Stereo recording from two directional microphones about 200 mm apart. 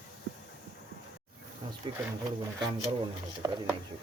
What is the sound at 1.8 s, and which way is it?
Speech, 20° right (ahead or behind).